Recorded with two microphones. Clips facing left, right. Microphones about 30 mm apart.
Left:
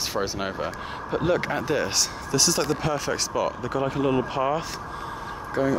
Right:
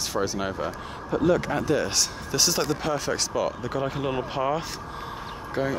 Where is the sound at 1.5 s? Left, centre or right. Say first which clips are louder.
Even; centre.